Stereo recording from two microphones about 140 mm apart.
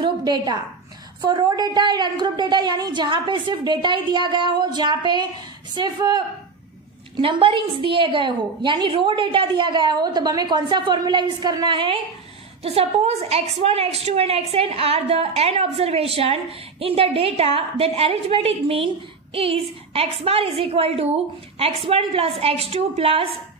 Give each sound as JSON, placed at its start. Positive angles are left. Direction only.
{"t": 0.0, "sound": "a sound", "side_deg": -30}
{"t": 1.2, "sound": "a woman's voice", "side_deg": -30}
{"t": 12.6, "sound": "a woman's voice", "side_deg": -45}